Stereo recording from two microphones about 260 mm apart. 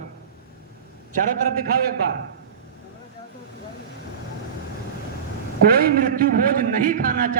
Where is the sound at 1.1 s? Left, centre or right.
Right.